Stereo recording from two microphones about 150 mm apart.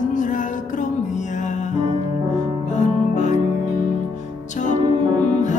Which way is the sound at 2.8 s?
55° left (ahead or behind).